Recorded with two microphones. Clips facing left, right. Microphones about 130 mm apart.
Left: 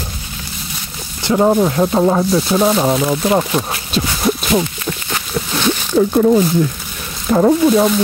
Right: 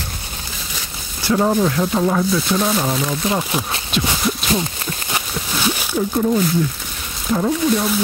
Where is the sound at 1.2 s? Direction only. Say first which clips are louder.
Left 4 dB; 20° left (ahead or behind).